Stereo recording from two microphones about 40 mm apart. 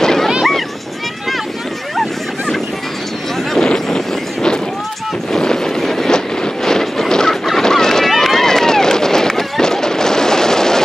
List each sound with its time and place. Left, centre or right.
0.0 s a sound: centre
3.5 s vehicle: centre
5.3 s a sound: centre
7.6 s boat: centre
8.1 s run: centre
9.6 s fireworks: centre